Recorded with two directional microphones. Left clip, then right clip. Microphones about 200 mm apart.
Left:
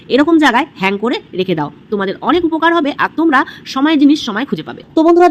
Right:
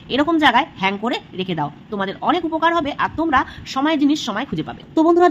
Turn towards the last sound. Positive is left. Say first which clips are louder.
# left 5 dB
turn(degrees=10)  # may be behind; listen again after turning